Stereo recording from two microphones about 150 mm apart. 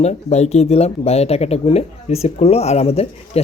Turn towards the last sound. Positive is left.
turn(degrees=40)  # may be behind; listen again after turning